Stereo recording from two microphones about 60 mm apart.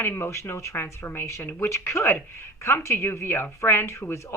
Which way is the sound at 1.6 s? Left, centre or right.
Left.